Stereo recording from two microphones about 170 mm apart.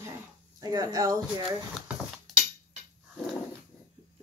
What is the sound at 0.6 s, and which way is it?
Speech, 20° right (ahead or behind).